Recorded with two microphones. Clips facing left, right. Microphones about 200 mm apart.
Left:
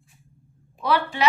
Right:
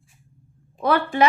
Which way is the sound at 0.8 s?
50° right (ahead or behind).